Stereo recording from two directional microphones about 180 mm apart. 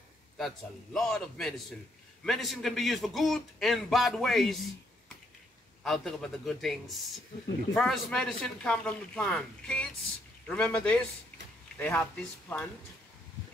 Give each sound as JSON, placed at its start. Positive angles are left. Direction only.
{"t": 0.9, "sound": "a man's voice", "side_deg": 0}
{"t": 5.9, "sound": "a man's voice", "side_deg": 0}